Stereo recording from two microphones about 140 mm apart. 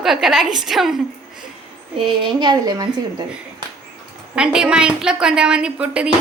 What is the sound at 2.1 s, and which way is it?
A woman's voice, 35° right (ahead or behind).